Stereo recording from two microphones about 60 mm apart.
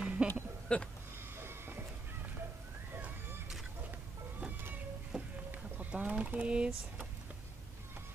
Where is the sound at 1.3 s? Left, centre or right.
Right.